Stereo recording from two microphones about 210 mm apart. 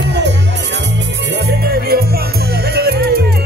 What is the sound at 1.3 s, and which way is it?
Music, 50° right (ahead or behind).